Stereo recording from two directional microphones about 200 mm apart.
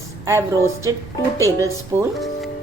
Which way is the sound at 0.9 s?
15° right (ahead or behind).